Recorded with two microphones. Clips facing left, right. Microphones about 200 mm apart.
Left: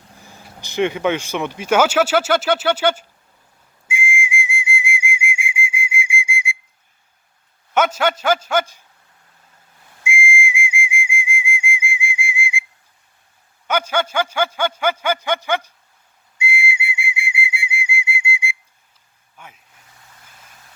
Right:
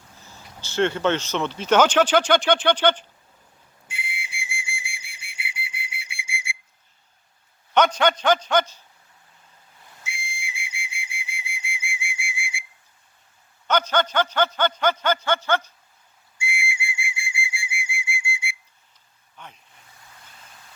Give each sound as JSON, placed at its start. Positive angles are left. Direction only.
{"t": 0.2, "sound": "speech", "side_deg": 15}
{"t": 3.8, "sound": "whistle", "side_deg": 10}
{"t": 7.9, "sound": "chopping", "side_deg": 5}
{"t": 10.0, "sound": "whistle", "side_deg": 15}
{"t": 13.7, "sound": "a sound", "side_deg": 10}
{"t": 16.4, "sound": "whistle", "side_deg": 20}
{"t": 19.4, "sound": "vehicle", "side_deg": 5}